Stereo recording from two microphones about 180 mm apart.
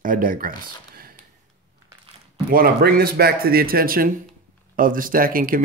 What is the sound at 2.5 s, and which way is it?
A man's voice, 55° right (ahead or behind).